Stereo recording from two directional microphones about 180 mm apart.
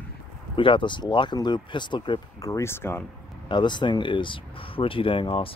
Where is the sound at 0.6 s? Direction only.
30° left (ahead or behind).